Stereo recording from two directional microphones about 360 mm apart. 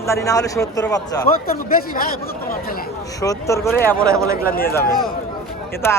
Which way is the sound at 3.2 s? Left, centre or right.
Centre.